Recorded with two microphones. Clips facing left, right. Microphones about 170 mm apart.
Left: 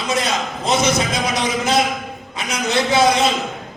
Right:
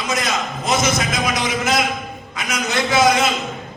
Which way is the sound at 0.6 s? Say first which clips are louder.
Left 2 dB; 30° left (ahead or behind).